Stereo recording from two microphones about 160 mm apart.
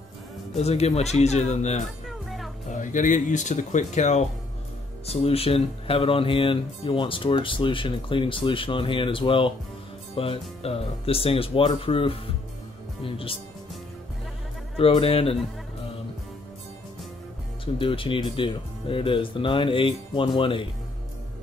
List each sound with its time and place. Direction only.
0.6 s speech: 40° left (ahead or behind)
2.0 s music: centre (ahead or behind)
2.7 s speech: 55° left (ahead or behind); by 13.4 s 35° left (ahead or behind)
14.8 s speech: 35° left (ahead or behind)
17.7 s speech: 35° left (ahead or behind)